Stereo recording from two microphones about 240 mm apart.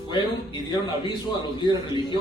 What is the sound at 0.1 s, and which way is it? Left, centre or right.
Speech, centre.